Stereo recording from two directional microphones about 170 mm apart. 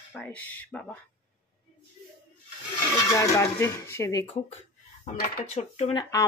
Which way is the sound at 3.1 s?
15° left (ahead or behind).